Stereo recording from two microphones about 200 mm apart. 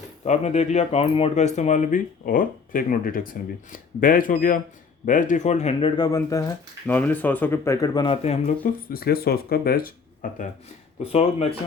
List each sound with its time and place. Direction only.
0.3 s speech: 35° left (ahead or behind)
6.0 s speech: 15° left (ahead or behind); by 8.5 s 30° left (ahead or behind)
8.6 s speech: 50° left (ahead or behind)
11.0 s speech: 30° left (ahead or behind)